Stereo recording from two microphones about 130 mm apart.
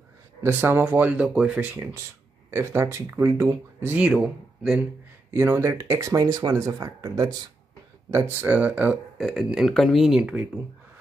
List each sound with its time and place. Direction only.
0.4 s speech: 15° right (ahead or behind)
5.3 s speech: 20° right (ahead or behind)
8.1 s speech: 15° right (ahead or behind)
9.2 s speech: centre (ahead or behind)